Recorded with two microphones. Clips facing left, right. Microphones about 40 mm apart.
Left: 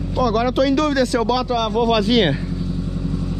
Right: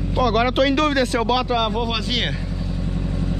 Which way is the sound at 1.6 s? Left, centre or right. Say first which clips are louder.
Left 4 dB; centre.